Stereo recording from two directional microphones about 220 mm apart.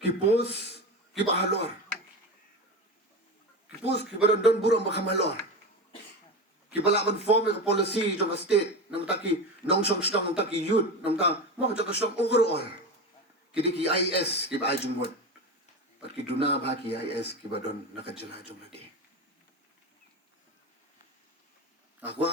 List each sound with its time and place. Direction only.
0.0 s a man's voice: 50° left (ahead or behind)
3.8 s a man's voice: 50° left (ahead or behind)
6.7 s a man's voice: 50° left (ahead or behind)
16.2 s a man's voice: 50° left (ahead or behind)
22.0 s a man's voice: 50° left (ahead or behind)